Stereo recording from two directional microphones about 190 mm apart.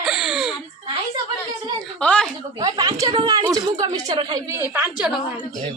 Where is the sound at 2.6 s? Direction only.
20° right (ahead or behind).